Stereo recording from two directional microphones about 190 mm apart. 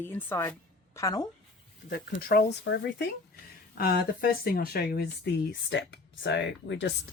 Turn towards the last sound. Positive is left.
turn(degrees=70)  # may be behind; listen again after turning